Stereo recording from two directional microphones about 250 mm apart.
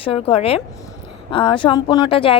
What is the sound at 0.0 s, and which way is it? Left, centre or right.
Speech, left.